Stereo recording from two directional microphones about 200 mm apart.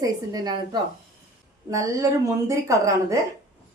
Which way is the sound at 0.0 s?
20° right (ahead or behind).